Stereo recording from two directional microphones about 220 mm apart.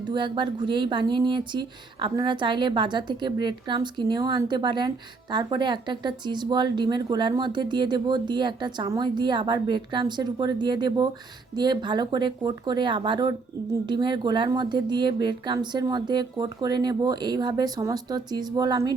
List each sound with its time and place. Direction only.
0.1 s speech: 20° right (ahead or behind)